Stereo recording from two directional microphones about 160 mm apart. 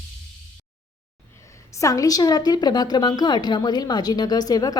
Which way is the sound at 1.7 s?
20° left (ahead or behind).